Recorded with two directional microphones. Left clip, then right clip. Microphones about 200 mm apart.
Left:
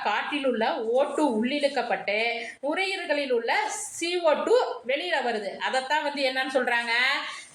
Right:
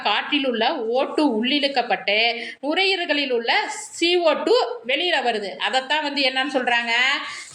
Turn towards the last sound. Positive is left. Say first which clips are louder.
# right 5 dB
turn(degrees=-45)  # may be behind; listen again after turning